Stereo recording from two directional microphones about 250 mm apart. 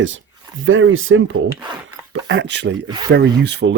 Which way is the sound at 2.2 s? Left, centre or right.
Right.